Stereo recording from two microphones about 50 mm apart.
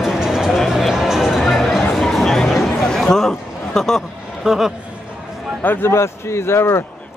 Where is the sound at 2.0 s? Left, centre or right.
Centre.